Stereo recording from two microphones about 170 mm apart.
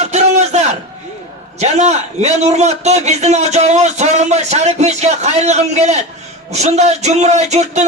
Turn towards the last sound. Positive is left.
turn(degrees=-40)  # may be behind; listen again after turning